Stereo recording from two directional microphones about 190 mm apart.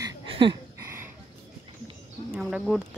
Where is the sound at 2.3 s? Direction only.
5° right (ahead or behind).